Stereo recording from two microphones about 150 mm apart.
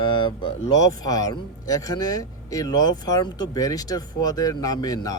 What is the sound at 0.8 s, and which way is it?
Speech, 25° left (ahead or behind).